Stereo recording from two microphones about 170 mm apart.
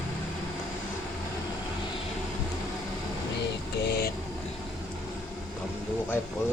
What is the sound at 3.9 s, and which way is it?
Vehicle, 70° left (ahead or behind).